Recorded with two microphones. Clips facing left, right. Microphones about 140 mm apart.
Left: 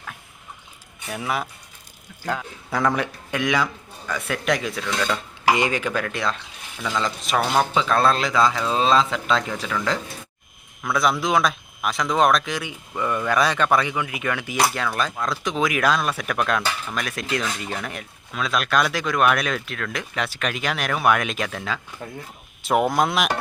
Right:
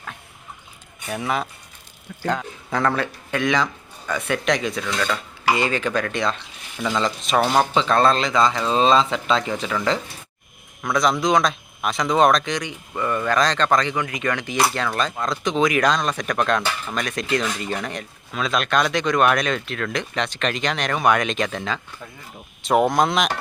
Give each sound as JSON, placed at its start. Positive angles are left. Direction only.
{"t": 1.0, "sound": "speech", "side_deg": 5}
{"t": 5.5, "sound": "speech", "side_deg": 15}